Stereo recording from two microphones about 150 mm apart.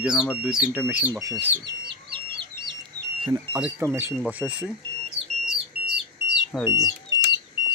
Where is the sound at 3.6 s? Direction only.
15° right (ahead or behind).